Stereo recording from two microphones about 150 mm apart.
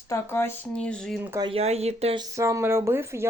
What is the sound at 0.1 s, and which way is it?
Speech, 15° left (ahead or behind).